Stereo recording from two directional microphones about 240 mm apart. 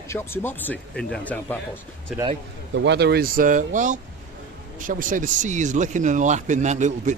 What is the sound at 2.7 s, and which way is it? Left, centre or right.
Speech, right.